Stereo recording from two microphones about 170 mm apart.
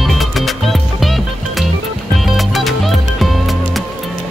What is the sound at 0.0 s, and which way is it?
Music, centre (ahead or behind).